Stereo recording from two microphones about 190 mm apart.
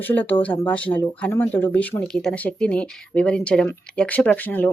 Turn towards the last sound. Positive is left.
turn(degrees=10)  # may be behind; listen again after turning